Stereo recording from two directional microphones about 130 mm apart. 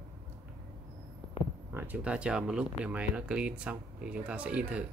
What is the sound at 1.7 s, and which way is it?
Speech, 15° right (ahead or behind).